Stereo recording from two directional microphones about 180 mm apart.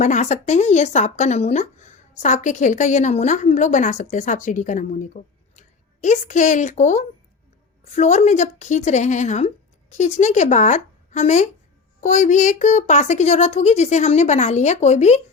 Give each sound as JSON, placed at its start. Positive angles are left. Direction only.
{"t": 0.0, "sound": "speech", "side_deg": 40}